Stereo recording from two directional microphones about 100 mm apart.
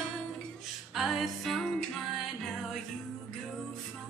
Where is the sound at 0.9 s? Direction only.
Centre (ahead or behind).